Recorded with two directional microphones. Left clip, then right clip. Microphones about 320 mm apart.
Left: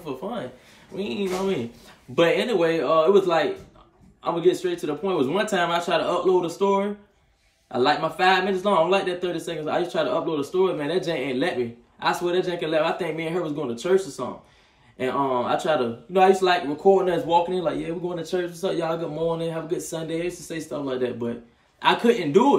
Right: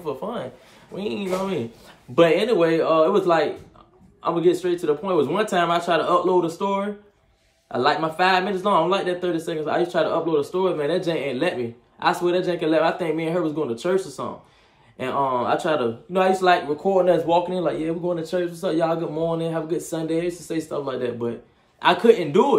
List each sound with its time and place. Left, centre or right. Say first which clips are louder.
0.0 s speech: right 3 dB; centre